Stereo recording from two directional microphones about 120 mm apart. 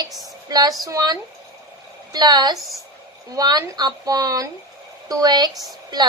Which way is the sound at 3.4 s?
35° right (ahead or behind).